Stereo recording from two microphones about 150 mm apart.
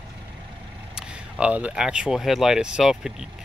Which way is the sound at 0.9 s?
5° right (ahead or behind).